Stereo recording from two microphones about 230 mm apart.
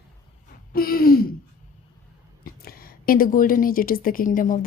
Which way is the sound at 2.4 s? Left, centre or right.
Left.